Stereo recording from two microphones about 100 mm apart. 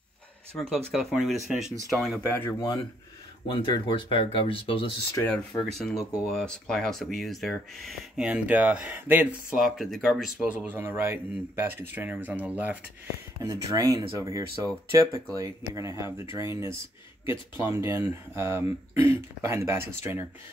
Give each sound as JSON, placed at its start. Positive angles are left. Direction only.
{"t": 0.5, "sound": "speech", "side_deg": 10}
{"t": 0.9, "sound": "speech", "side_deg": 0}
{"t": 2.2, "sound": "speech", "side_deg": 20}
{"t": 3.6, "sound": "speech", "side_deg": 55}
{"t": 5.7, "sound": "speech", "side_deg": 0}
{"t": 8.3, "sound": "speech", "side_deg": -15}
{"t": 9.6, "sound": "speech", "side_deg": 0}
{"t": 10.4, "sound": "speech", "side_deg": -15}
{"t": 13.4, "sound": "speech", "side_deg": -30}